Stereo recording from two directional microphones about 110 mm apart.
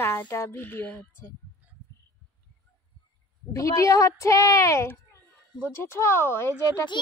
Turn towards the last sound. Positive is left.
turn(degrees=45)  # may be behind; listen again after turning